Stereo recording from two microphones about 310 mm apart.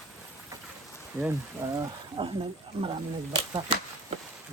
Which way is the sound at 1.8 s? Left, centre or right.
Centre.